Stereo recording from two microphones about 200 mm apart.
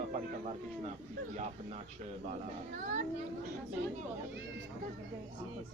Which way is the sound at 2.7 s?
40° right (ahead or behind).